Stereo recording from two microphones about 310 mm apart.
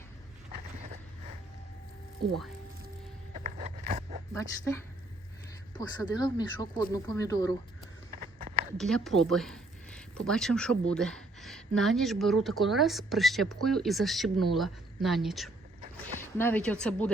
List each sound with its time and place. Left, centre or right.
3.3 s zipper: right
4.4 s speech: centre
8.1 s a sound: right
8.8 s speech: centre